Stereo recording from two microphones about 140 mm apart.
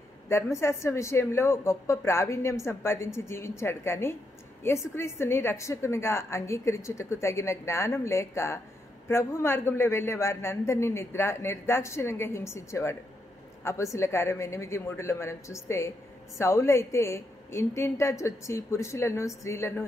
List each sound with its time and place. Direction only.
0.3 s a woman's voice: 20° left (ahead or behind)
13.9 s a woman's voice: 20° left (ahead or behind)